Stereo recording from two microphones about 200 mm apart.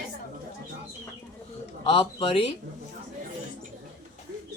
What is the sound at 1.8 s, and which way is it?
Speech, 25° left (ahead or behind).